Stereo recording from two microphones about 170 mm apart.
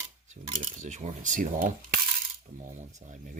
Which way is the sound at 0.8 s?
45° right (ahead or behind).